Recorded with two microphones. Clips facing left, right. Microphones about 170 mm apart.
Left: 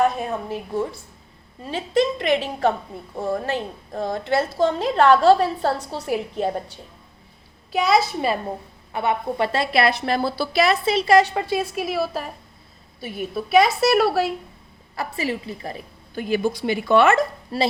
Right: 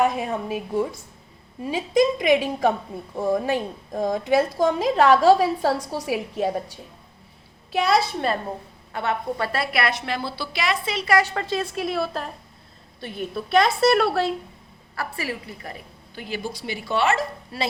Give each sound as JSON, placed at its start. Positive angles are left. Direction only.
{"t": 0.0, "sound": "a woman's voice", "side_deg": -10}
{"t": 8.9, "sound": "a woman's voice", "side_deg": 15}
{"t": 14.9, "sound": "a woman's voice", "side_deg": 20}
{"t": 16.1, "sound": "speech", "side_deg": 50}